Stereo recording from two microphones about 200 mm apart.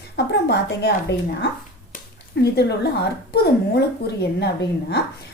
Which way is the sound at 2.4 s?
55° left (ahead or behind).